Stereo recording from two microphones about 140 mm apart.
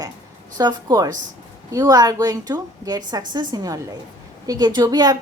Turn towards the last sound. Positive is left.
turn(degrees=-25)  # may be behind; listen again after turning